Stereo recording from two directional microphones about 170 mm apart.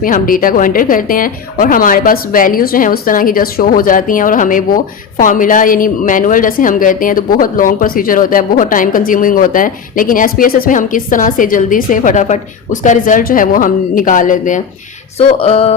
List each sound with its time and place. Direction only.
0.0 s a woman's voice: 55° left (ahead or behind)
15.4 s music: 35° left (ahead or behind)